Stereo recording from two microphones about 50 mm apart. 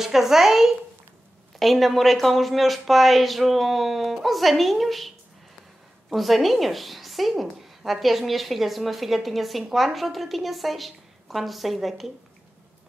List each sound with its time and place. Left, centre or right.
0.0 s a woman's voice: centre